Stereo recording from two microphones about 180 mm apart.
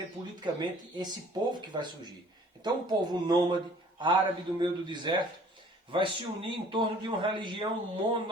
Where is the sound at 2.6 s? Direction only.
25° right (ahead or behind).